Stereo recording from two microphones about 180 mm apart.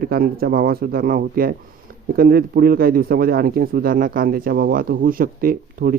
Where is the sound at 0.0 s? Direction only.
55° right (ahead or behind).